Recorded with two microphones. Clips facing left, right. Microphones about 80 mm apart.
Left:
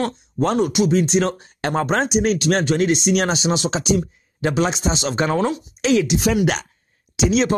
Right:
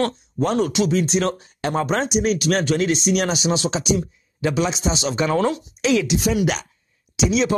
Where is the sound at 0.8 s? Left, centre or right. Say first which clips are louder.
Left 4 dB; left.